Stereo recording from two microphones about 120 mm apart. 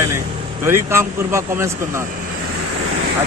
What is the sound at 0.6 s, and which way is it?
A man's voice, 20° right (ahead or behind).